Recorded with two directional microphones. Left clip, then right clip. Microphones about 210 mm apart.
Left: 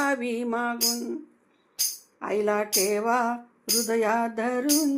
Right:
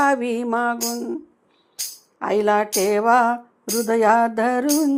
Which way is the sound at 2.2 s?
35° right (ahead or behind).